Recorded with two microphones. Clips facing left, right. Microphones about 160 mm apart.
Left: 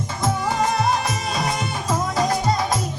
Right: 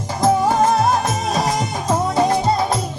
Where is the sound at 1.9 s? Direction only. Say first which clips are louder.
Right 5 dB; 30° right (ahead or behind).